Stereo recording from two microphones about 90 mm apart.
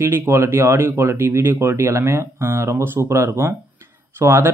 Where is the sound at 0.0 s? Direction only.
25° right (ahead or behind).